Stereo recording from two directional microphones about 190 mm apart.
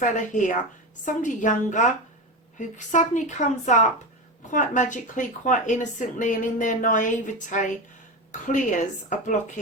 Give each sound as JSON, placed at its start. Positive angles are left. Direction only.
{"t": 0.0, "sound": "a woman's voice", "side_deg": 40}